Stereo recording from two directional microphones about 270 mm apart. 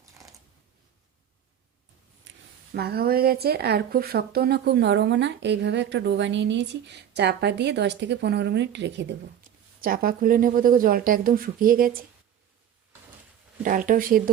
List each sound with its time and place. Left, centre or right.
2.3 s a sound: right
2.7 s a woman's voice: right
13.6 s speech: right